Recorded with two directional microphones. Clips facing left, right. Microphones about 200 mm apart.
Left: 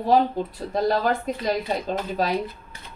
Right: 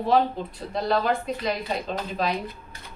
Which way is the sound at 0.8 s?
45° left (ahead or behind).